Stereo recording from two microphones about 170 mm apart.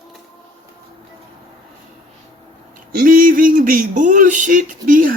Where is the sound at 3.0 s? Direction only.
55° right (ahead or behind).